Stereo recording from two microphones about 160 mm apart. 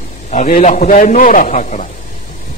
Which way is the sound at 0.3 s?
45° left (ahead or behind).